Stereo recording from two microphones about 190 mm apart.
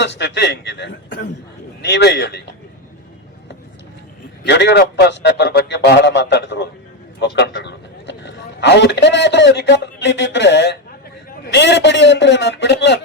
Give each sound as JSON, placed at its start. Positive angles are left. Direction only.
{"t": 0.0, "sound": "a man's voice", "side_deg": 65}
{"t": 4.4, "sound": "a man's voice", "side_deg": 65}